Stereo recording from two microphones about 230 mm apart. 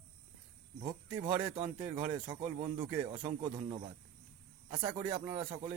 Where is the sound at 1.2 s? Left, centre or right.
Centre.